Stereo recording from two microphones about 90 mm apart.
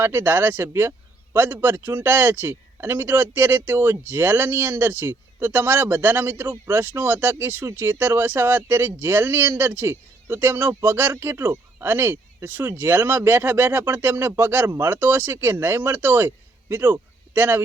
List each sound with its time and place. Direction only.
0.0 s a man's voice: 25° right (ahead or behind)